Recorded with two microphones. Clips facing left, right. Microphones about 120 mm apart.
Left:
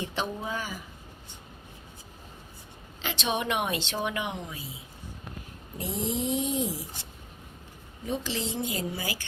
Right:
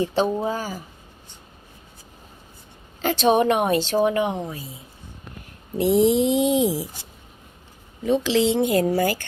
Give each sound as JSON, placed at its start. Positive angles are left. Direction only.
{"t": 0.0, "sound": "a woman's voice", "side_deg": -35}
{"t": 3.0, "sound": "a woman's voice", "side_deg": -45}
{"t": 5.7, "sound": "speech", "side_deg": -85}
{"t": 8.0, "sound": "speech", "side_deg": -90}